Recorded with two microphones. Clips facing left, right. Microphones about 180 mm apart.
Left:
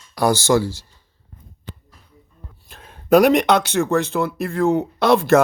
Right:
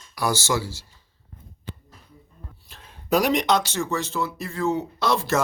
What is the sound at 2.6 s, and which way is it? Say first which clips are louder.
Speech: left 11 dB; 50° left (ahead or behind).